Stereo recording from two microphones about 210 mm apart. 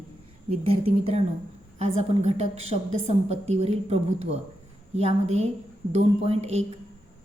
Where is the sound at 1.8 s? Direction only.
30° right (ahead or behind).